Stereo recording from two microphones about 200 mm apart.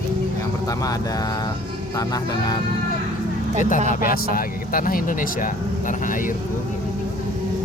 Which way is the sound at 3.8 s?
45° left (ahead or behind).